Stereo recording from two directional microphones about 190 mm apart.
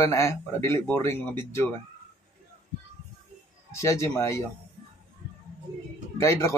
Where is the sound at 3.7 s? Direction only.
15° left (ahead or behind).